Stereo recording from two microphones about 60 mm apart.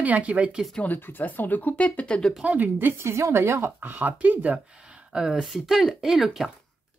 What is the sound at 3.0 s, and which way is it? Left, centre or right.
Speech, right.